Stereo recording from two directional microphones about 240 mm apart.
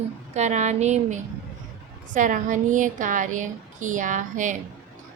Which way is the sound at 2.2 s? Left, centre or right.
Right.